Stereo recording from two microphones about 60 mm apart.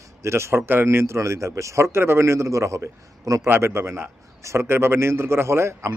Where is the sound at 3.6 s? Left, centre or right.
Right.